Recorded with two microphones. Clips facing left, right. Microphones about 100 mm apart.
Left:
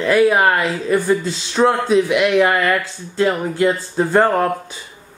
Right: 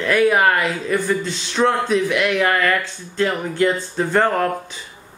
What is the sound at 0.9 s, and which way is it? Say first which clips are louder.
Speech: left 5 dB; 10° left (ahead or behind).